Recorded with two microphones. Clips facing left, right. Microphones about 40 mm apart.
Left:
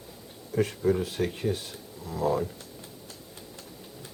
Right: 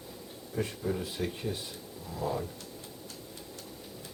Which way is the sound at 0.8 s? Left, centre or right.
Centre.